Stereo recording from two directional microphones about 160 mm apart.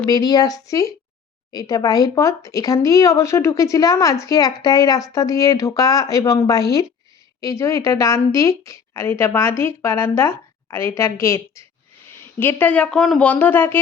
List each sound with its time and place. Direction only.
0.0 s a woman's voice: 25° left (ahead or behind)